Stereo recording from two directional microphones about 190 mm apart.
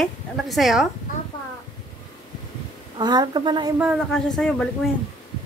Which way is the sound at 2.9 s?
20° right (ahead or behind).